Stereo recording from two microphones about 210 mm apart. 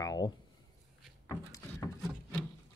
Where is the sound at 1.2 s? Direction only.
15° left (ahead or behind).